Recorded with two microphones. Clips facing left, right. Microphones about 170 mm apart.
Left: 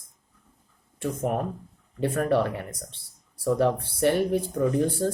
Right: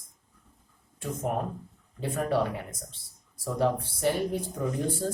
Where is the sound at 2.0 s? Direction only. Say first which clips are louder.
Left 4 dB; 65° left (ahead or behind).